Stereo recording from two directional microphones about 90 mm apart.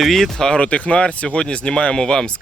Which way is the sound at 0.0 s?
5° left (ahead or behind).